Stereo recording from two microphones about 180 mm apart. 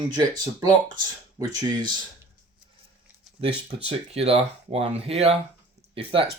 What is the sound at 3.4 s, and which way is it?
Speech, 30° right (ahead or behind).